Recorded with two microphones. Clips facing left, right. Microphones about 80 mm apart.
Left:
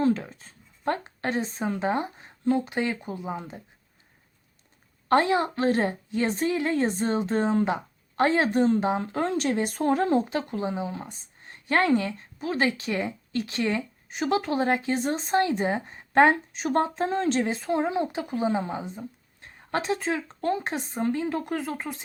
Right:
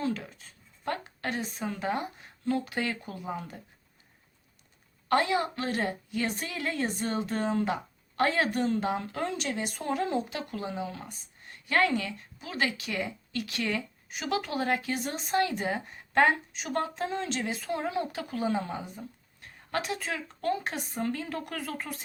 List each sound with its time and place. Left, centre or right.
0.0 s speech: left
5.0 s a woman's voice: left